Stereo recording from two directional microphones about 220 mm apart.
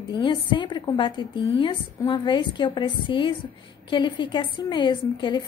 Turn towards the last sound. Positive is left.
turn(degrees=20)  # may be behind; listen again after turning